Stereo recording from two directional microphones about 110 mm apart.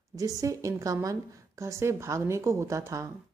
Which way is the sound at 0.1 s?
30° right (ahead or behind).